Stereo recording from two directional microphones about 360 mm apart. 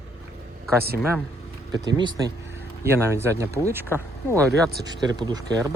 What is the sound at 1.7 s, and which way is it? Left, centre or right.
Speech, centre.